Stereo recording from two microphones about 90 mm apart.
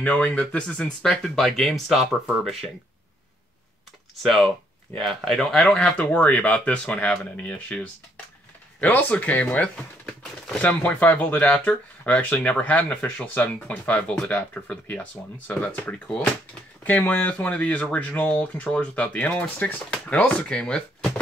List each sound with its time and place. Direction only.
0.0 s speech: 15° left (ahead or behind); by 2.3 s centre (ahead or behind)
4.2 s speech: centre (ahead or behind)
9.1 s speech: 15° left (ahead or behind)